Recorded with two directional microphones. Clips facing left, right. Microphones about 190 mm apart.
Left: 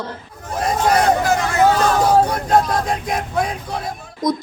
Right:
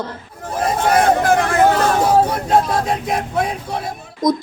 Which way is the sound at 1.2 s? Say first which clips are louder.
Right 2 dB; 55° right (ahead or behind).